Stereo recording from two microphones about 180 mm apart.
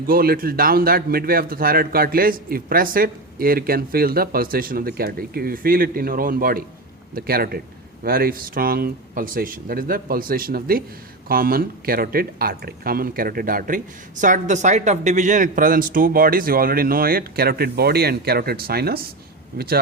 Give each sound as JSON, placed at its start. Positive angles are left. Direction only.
{"t": 0.1, "sound": "a man's voice", "side_deg": -55}